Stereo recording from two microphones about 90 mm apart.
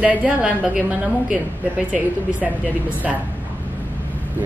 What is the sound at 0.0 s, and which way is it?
A woman's voice, 15° right (ahead or behind).